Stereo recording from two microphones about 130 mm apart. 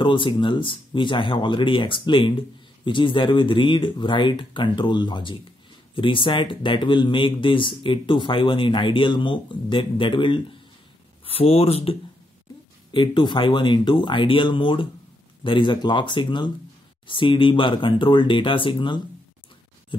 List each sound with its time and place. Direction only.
0.0 s speech: 40° left (ahead or behind)
12.9 s speech: 35° left (ahead or behind)